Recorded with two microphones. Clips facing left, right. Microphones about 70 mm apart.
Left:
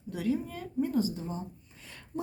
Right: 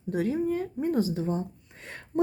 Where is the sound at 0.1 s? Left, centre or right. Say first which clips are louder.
Right 5 dB; right.